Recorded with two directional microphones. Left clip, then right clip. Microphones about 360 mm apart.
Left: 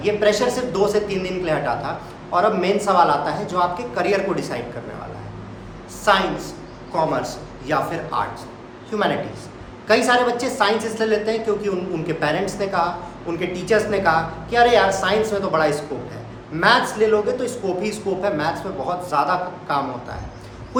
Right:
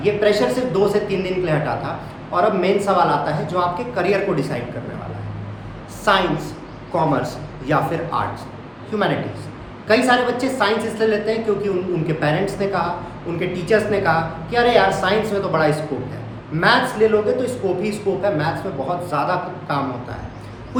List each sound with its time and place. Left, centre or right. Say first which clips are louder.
0.0 s a woman's voice: right 1 dB; centre
6.1 s a man's voice: right 1 dB; centre